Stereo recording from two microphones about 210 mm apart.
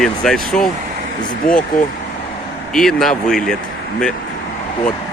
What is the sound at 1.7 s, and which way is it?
Speech, 40° left (ahead or behind).